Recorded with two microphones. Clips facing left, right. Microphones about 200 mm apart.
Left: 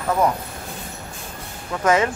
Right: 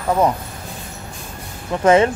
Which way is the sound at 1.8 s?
30° right (ahead or behind).